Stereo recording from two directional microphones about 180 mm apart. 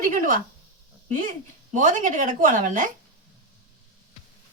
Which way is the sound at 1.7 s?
45° right (ahead or behind).